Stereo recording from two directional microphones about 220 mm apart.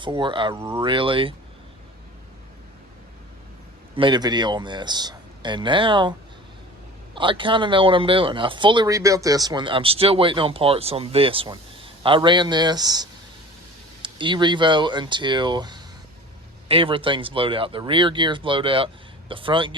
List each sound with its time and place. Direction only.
0.0 s speech: 20° right (ahead or behind)
3.9 s speech: 20° right (ahead or behind)